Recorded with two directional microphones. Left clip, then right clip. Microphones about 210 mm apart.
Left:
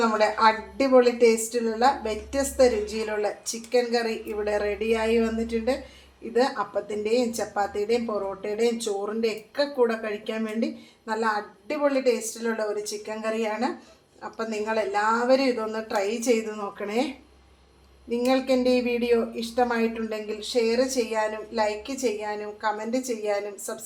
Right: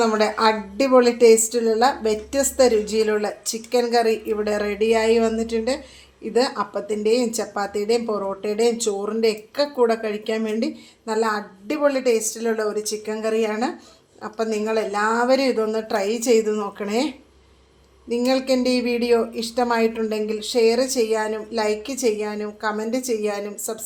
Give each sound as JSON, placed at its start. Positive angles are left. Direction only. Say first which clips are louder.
{"t": 0.0, "sound": "speech", "louder": "right 2 dB", "side_deg": -50}
{"t": 18.1, "sound": "speech", "louder": "right 3 dB", "side_deg": -45}